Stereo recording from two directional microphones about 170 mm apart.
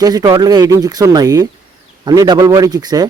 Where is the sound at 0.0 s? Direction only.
20° right (ahead or behind).